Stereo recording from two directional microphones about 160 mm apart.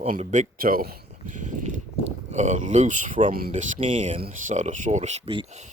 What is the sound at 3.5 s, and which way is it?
Speech, 35° right (ahead or behind).